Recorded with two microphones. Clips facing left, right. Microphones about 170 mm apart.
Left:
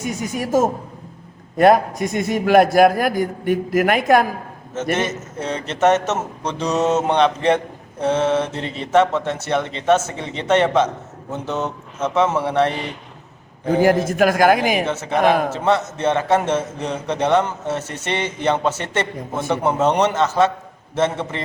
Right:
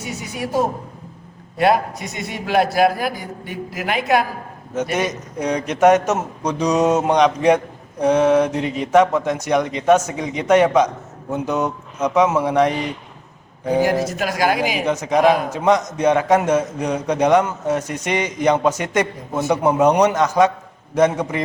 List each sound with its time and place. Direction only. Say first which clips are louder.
0.0 s a man's voice: left 3 dB; 45° left (ahead or behind)
4.7 s a man's voice: even; 15° right (ahead or behind)
14.0 s a man's voice: left 5 dB; 50° left (ahead or behind)
14.8 s a man's voice: right 6 dB; 15° right (ahead or behind)